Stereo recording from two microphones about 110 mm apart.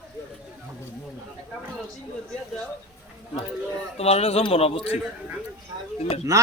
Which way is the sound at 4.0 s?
70° left (ahead or behind).